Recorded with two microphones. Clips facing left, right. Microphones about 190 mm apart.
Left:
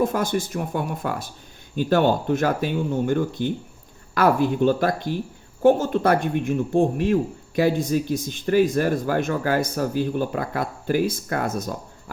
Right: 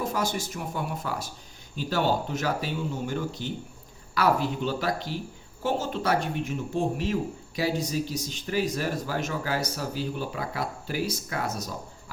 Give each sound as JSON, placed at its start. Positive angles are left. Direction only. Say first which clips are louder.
{"t": 0.0, "sound": "speech", "louder": "left 7 dB", "side_deg": 55}